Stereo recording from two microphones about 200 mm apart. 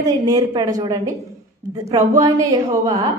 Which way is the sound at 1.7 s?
15° right (ahead or behind).